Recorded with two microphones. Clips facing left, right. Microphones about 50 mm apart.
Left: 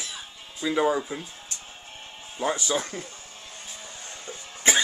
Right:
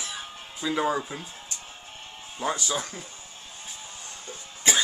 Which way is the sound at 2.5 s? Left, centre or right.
Left.